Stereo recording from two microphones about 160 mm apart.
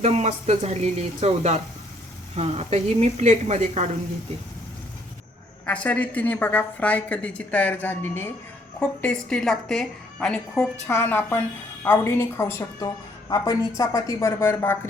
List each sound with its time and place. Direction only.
0.0 s speech: 45° right (ahead or behind)
5.6 s a woman's voice: 10° left (ahead or behind)